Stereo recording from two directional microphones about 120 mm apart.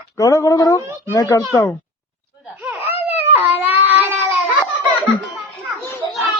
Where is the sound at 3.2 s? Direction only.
15° right (ahead or behind).